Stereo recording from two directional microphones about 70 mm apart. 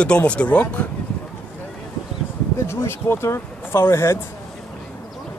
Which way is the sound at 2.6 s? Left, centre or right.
Left.